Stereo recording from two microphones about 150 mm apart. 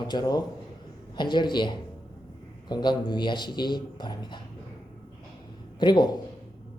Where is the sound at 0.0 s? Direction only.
30° left (ahead or behind).